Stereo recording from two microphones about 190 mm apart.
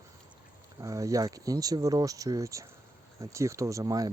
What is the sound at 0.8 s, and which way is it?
Speech, 15° right (ahead or behind).